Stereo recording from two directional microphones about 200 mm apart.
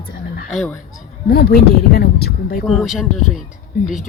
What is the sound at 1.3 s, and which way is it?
Speech, 50° left (ahead or behind).